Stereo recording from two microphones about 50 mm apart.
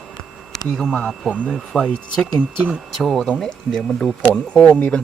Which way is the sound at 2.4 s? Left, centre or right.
Right.